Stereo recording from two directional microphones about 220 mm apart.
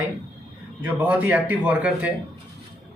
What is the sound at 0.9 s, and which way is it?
Speech, 10° right (ahead or behind).